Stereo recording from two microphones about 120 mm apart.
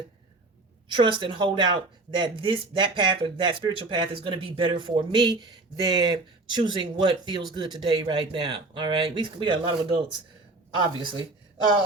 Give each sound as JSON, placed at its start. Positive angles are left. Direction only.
{"t": 0.9, "sound": "speech", "side_deg": -40}